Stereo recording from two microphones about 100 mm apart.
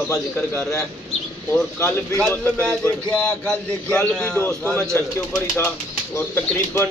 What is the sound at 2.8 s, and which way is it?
A man's voice, 10° left (ahead or behind).